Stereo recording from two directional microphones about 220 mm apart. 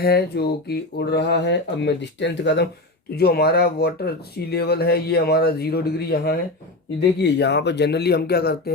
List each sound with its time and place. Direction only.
0.0 s speech: 45° left (ahead or behind)